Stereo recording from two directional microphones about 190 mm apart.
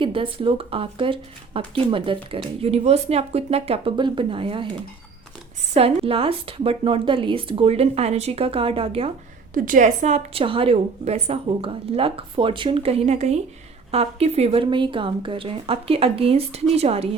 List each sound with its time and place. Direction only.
0.0 s a woman's voice: 25° right (ahead or behind)
5.7 s a woman's voice: 30° right (ahead or behind)
9.6 s a woman's voice: 45° right (ahead or behind)